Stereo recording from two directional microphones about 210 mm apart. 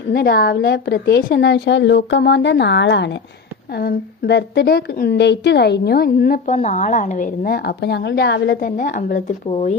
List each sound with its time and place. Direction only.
0.1 s a woman's voice: 50° left (ahead or behind); by 9.7 s 30° left (ahead or behind)